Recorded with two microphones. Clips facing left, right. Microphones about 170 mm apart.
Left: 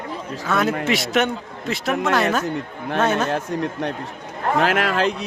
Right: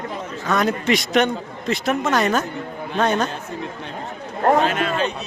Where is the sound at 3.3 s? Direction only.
70° left (ahead or behind).